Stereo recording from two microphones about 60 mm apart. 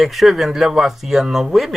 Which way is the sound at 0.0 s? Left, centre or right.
Centre.